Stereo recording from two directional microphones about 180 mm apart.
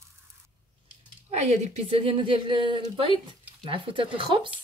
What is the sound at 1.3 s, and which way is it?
A woman's voice, 40° right (ahead or behind).